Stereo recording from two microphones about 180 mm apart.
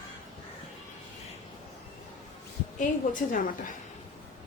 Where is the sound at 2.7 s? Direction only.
45° left (ahead or behind).